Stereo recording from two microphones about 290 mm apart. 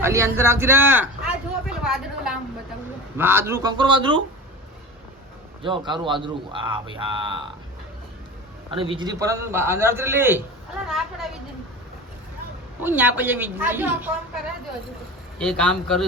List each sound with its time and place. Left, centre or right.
0.0 s speech: centre
1.6 s a sound: centre
3.2 s speech: centre
5.6 s speech: centre
8.7 s a man's voice: centre
12.8 s speech: centre
15.4 s a man's voice: centre